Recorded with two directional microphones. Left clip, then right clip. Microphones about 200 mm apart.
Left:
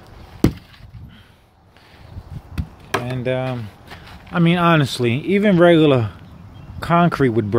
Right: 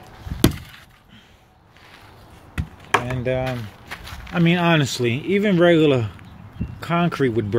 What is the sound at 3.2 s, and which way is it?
Speech, 5° left (ahead or behind).